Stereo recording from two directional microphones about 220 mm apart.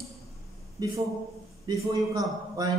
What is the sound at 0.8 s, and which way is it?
A man's voice, 15° right (ahead or behind).